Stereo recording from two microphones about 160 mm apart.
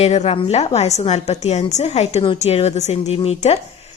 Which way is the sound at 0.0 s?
40° left (ahead or behind).